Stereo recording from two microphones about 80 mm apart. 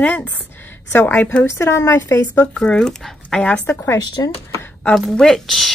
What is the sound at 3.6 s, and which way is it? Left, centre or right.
Speech, left.